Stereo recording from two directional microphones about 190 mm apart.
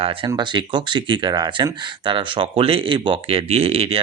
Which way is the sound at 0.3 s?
25° right (ahead or behind).